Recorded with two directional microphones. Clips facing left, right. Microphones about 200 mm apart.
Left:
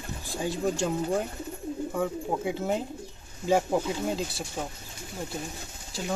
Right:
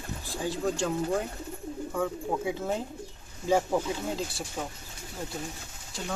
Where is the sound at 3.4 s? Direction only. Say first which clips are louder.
Left 1 dB; 15° left (ahead or behind).